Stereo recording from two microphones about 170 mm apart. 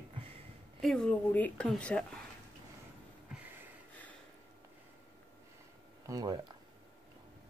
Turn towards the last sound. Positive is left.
turn(degrees=-20)  # may be behind; listen again after turning